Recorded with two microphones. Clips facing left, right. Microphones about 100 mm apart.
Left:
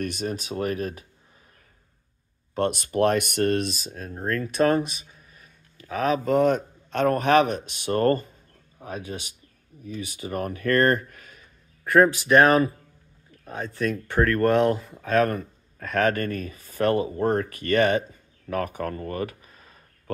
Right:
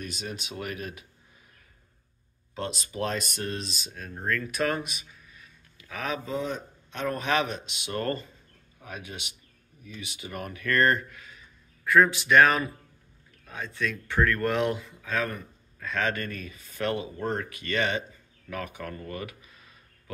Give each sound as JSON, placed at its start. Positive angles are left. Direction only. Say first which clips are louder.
{"t": 0.0, "sound": "speech", "louder": "left 8 dB", "side_deg": 50}
{"t": 2.5, "sound": "speech", "louder": "left 10 dB", "side_deg": 55}
{"t": 6.2, "sound": "speech", "louder": "left 11 dB", "side_deg": 70}
{"t": 8.7, "sound": "speech", "louder": "left 7 dB", "side_deg": 35}
{"t": 12.3, "sound": "speech", "louder": "left 3 dB", "side_deg": 35}